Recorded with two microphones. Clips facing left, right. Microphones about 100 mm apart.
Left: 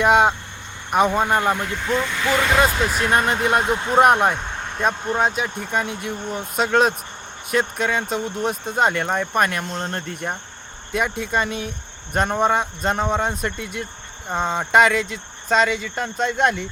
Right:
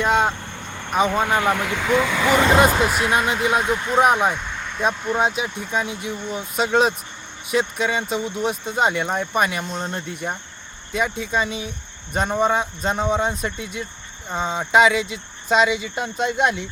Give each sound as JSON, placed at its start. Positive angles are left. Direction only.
{"t": 0.0, "sound": "speech", "side_deg": 10}
{"t": 0.9, "sound": "speech", "side_deg": 0}
{"t": 1.5, "sound": "speech", "side_deg": -90}
{"t": 2.2, "sound": "speech", "side_deg": -20}
{"t": 3.6, "sound": "speech", "side_deg": 30}
{"t": 4.0, "sound": "speech", "side_deg": 0}
{"t": 4.4, "sound": "vehicle", "side_deg": 40}
{"t": 5.4, "sound": "speech", "side_deg": 0}